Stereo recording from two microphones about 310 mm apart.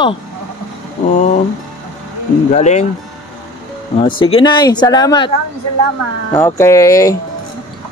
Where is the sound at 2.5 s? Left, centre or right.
Left.